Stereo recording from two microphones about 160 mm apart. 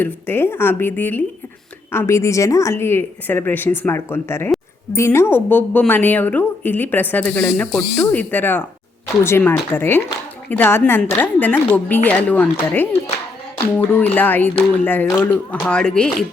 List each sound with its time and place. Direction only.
0.0 s speech: 15° left (ahead or behind)
7.9 s speech: 15° left (ahead or behind)